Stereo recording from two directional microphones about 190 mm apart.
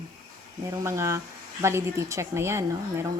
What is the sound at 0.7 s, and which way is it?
Speech, 15° right (ahead or behind).